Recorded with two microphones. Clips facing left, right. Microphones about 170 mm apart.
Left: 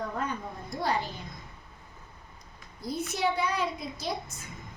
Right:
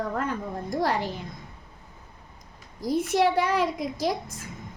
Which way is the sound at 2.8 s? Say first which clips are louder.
Right 7 dB; 90° right.